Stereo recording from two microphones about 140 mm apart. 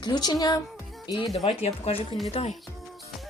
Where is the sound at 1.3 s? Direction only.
45° left (ahead or behind).